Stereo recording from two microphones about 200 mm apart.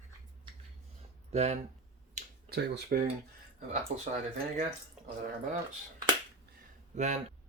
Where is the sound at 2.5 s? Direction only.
50° right (ahead or behind).